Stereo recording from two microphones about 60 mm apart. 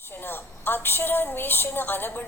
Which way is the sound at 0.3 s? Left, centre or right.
Left.